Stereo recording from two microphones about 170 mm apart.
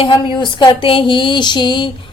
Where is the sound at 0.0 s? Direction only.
25° left (ahead or behind).